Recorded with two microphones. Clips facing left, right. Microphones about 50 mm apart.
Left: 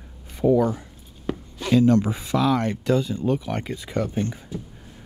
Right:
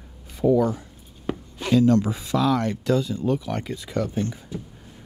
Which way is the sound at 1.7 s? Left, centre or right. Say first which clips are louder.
Left 1 dB; left.